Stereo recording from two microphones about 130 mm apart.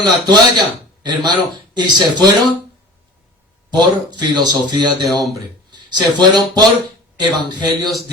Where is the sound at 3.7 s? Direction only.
35° right (ahead or behind).